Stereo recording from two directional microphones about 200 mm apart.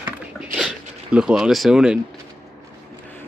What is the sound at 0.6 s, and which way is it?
Zipper, 5° right (ahead or behind).